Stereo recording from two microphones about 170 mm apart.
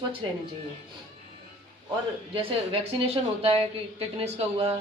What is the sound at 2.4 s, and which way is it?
A woman's voice, 35° right (ahead or behind).